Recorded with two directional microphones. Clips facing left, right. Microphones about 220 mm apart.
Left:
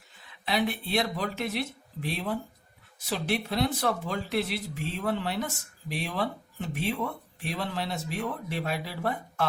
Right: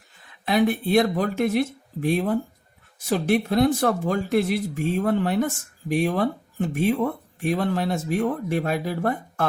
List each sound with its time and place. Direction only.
0.3 s speech: 50° right (ahead or behind)